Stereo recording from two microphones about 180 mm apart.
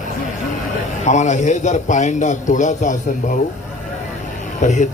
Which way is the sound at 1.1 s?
40° left (ahead or behind).